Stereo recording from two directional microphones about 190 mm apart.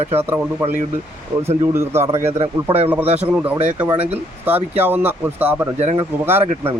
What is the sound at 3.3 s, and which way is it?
Speech, 10° right (ahead or behind).